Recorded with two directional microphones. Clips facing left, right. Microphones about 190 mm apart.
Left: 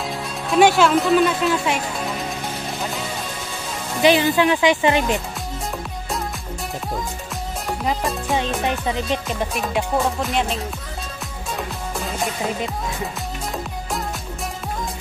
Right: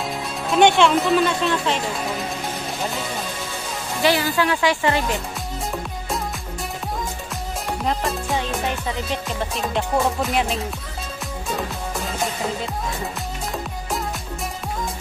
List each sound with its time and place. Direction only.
0.5 s speech: 5° left (ahead or behind)
4.0 s speech: 20° left (ahead or behind)
7.8 s speech: centre (ahead or behind)
9.1 s music: 15° left (ahead or behind)
9.9 s speech: centre (ahead or behind)